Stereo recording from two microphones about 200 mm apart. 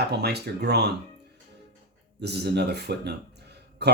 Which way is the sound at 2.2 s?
55° right (ahead or behind).